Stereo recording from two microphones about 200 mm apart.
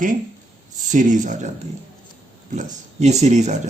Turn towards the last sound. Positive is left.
turn(degrees=-35)  # may be behind; listen again after turning